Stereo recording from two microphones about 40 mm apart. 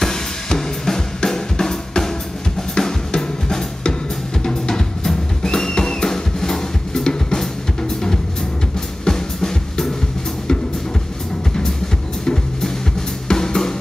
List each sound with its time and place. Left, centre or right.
0.0 s drum kit: centre
2.7 s drum: centre
9.0 s music: centre
13.3 s drum: centre